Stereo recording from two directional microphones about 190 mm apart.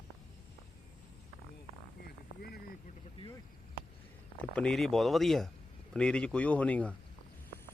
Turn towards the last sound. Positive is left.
turn(degrees=5)  # may be behind; listen again after turning